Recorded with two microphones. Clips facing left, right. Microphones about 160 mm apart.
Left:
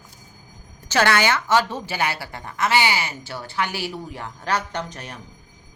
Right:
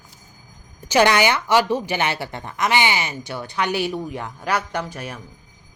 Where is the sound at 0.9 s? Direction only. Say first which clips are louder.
Right 3 dB; 15° right (ahead or behind).